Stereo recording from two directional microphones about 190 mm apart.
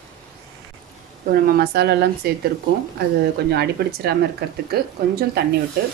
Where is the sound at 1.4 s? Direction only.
50° right (ahead or behind).